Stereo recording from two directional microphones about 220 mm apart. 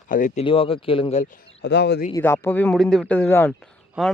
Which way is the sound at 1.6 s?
50° left (ahead or behind).